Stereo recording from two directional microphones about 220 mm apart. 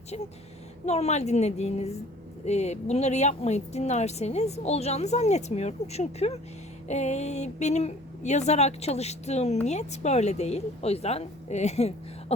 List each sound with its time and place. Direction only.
0.9 s a woman's voice: 30° left (ahead or behind)